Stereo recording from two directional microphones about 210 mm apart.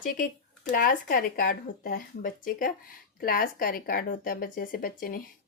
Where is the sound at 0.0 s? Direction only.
40° left (ahead or behind).